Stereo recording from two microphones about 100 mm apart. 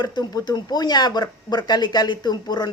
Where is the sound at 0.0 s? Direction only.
45° left (ahead or behind).